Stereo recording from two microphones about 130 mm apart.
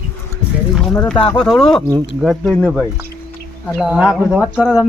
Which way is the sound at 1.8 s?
30° right (ahead or behind).